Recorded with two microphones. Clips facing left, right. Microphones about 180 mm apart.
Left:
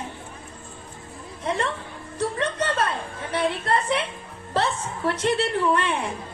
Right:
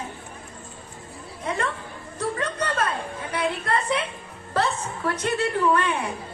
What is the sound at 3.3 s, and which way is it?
Speech, 25° left (ahead or behind).